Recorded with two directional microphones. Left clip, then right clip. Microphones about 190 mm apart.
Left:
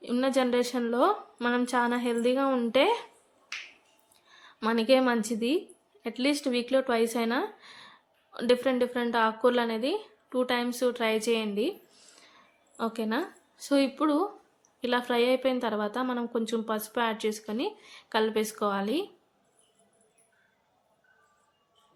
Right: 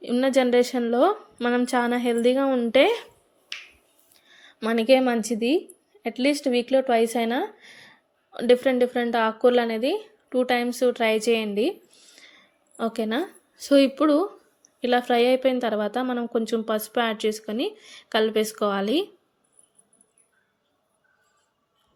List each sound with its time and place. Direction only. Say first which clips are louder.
0.0 s a woman's voice: right 6 dB; 20° right (ahead or behind)
4.3 s a woman's voice: right 3 dB; 15° right (ahead or behind)